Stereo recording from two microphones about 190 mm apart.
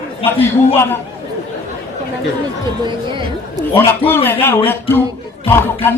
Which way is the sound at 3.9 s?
10° left (ahead or behind).